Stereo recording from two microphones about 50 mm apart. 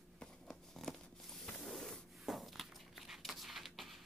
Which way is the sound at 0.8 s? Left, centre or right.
Centre.